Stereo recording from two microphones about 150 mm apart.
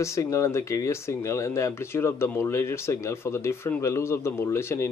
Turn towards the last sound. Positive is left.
turn(degrees=15)  # may be behind; listen again after turning